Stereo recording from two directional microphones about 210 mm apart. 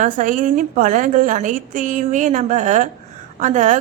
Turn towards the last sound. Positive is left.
turn(degrees=-35)  # may be behind; listen again after turning